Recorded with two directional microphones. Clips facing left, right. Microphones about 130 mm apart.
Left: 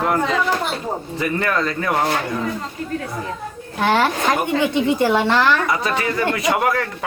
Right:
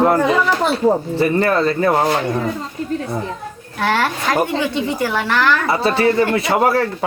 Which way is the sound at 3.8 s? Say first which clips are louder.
Left 1 dB; 20° left (ahead or behind).